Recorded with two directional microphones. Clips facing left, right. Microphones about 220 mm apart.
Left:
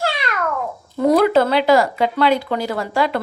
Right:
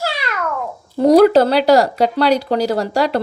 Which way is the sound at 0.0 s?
5° right (ahead or behind).